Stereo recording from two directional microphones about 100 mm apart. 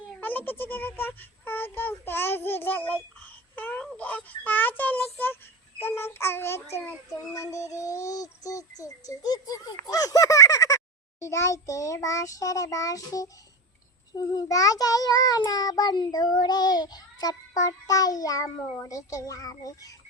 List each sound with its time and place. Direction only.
0.2 s a child's voice: 20° left (ahead or behind)
7.3 s child singing: 30° left (ahead or behind)